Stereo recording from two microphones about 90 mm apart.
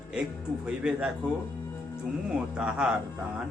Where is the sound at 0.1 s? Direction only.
10° right (ahead or behind).